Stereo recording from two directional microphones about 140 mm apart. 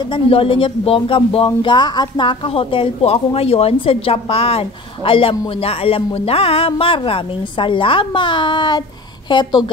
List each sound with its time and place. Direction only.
0.0 s speech: 40° left (ahead or behind)